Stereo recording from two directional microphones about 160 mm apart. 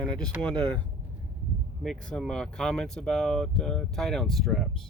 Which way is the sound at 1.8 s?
5° left (ahead or behind).